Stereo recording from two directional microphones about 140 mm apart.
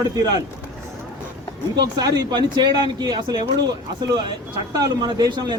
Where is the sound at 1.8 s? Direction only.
30° right (ahead or behind).